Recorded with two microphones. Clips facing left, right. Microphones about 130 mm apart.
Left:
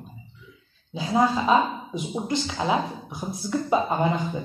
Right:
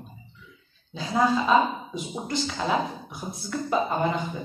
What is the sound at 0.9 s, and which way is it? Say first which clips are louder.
Speech: left 1 dB; 20° left (ahead or behind).